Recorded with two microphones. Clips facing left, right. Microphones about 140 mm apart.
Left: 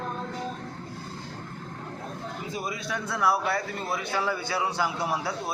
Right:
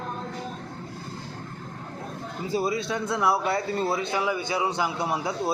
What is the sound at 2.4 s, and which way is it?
Speech, 30° right (ahead or behind).